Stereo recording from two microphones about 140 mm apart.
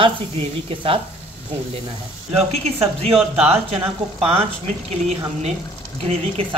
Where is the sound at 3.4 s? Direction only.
45° right (ahead or behind).